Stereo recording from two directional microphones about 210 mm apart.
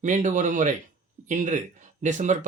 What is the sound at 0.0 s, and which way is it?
Speech, 35° right (ahead or behind).